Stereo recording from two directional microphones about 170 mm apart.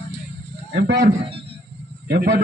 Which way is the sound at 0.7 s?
75° right (ahead or behind).